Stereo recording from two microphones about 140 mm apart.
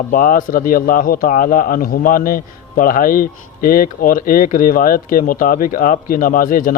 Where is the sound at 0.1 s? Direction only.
75° left (ahead or behind).